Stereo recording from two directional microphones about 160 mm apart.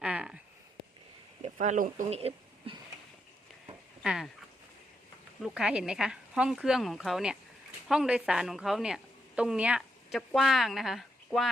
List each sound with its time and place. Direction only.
0.0 s a sound: 5° right (ahead or behind)
1.4 s speech: 50° right (ahead or behind)
4.0 s speech: 5° right (ahead or behind)
5.4 s a woman's voice: 5° right (ahead or behind)